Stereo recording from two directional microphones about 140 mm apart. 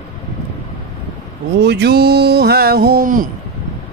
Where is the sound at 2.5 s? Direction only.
90° right.